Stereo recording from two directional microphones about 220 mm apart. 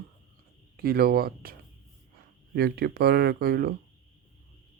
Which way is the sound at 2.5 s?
45° right (ahead or behind).